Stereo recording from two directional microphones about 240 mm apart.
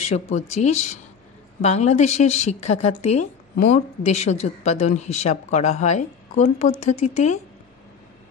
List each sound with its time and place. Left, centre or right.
0.1 s a woman's voice: left